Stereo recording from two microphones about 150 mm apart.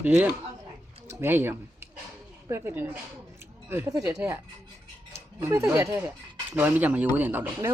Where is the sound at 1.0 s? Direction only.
15° right (ahead or behind).